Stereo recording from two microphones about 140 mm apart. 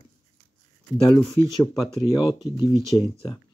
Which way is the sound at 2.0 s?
35° left (ahead or behind).